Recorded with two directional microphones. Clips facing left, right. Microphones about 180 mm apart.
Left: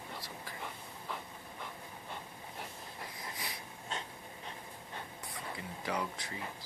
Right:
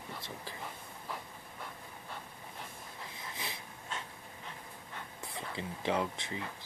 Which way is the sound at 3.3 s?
25° right (ahead or behind).